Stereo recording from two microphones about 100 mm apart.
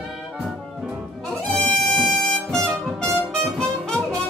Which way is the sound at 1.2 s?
5° left (ahead or behind).